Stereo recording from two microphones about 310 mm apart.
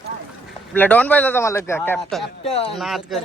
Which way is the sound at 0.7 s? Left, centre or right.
Centre.